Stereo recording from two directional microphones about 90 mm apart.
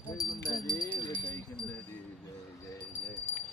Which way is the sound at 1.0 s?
60° left (ahead or behind).